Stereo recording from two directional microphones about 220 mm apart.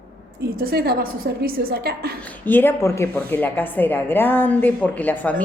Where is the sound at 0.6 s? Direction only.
45° right (ahead or behind).